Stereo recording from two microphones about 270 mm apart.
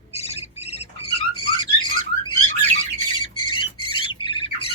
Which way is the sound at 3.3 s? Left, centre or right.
Centre.